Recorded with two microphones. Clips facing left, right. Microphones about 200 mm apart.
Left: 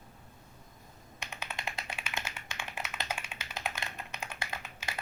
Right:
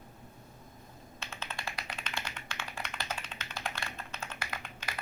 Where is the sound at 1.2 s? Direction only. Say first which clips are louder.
Left 1 dB; 15° left (ahead or behind).